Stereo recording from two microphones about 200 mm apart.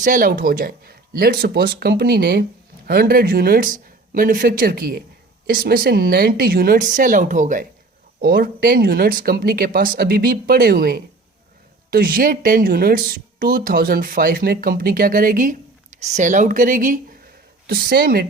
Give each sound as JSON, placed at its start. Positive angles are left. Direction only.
{"t": 0.0, "sound": "speech", "side_deg": -45}